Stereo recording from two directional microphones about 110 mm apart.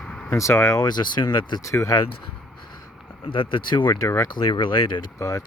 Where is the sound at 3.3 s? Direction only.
50° left (ahead or behind).